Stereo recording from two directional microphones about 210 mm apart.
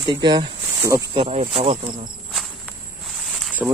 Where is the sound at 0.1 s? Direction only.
20° right (ahead or behind).